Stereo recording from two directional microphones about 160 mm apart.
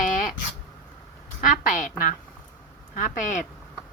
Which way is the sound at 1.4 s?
55° left (ahead or behind).